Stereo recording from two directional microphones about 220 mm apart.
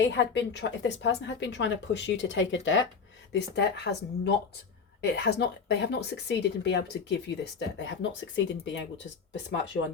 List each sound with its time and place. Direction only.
0.0 s a woman's voice: 55° left (ahead or behind)